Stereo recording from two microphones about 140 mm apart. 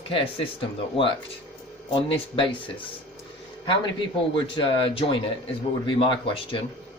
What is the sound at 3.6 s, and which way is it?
A man's voice, 35° left (ahead or behind).